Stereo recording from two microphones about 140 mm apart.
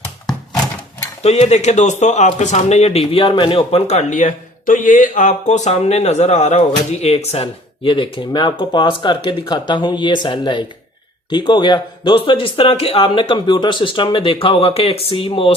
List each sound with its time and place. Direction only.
1.2 s a man's voice: 50° left (ahead or behind)